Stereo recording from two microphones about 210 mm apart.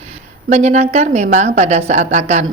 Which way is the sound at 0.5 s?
30° right (ahead or behind).